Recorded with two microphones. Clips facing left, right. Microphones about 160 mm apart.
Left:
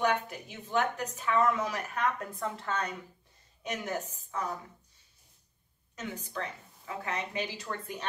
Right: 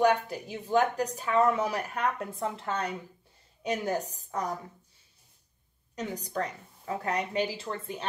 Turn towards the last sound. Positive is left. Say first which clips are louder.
# right 3 dB
turn(degrees=-25)  # may be behind; listen again after turning